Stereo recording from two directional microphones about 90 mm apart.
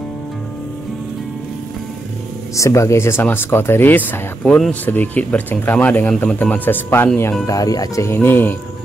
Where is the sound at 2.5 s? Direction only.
35° left (ahead or behind).